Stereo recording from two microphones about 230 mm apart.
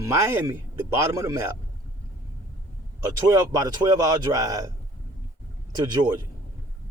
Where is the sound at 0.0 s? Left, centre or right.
Centre.